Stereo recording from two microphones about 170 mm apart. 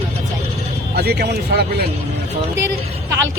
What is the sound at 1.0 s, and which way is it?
Speech, 70° right (ahead or behind).